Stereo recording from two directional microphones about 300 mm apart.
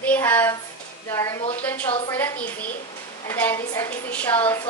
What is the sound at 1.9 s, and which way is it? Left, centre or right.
Speech, centre.